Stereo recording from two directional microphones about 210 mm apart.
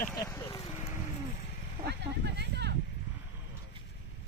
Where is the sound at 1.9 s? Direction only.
55° right (ahead or behind).